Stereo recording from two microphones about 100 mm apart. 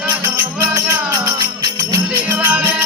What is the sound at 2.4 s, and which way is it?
Music, 25° right (ahead or behind).